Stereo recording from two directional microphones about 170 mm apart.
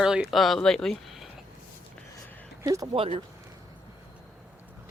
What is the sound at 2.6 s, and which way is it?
Speech, 20° right (ahead or behind).